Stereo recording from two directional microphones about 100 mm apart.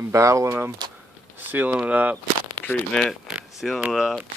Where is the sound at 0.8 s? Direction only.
50° right (ahead or behind).